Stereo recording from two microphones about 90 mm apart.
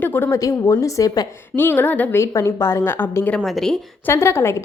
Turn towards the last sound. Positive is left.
turn(degrees=30)  # may be behind; listen again after turning